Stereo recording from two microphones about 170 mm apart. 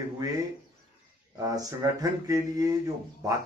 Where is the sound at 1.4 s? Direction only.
20° right (ahead or behind).